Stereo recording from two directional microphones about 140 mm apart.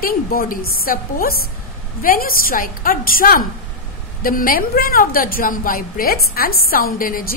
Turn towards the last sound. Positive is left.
turn(degrees=90)